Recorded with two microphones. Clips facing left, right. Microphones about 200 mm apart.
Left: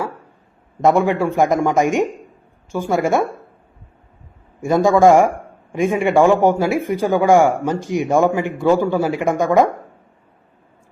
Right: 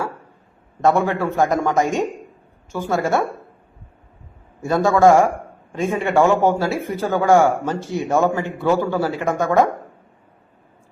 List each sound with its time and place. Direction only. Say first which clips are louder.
0.8 s a man's voice: left 3 dB; 15° left (ahead or behind)
4.6 s a man's voice: left 2 dB; 15° left (ahead or behind)